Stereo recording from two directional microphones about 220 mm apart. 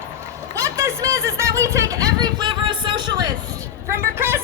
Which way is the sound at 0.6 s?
15° right (ahead or behind).